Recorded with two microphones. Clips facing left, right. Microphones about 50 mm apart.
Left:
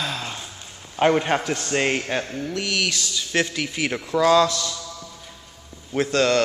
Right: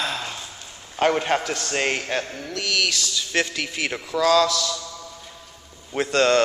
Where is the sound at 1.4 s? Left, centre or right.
Centre.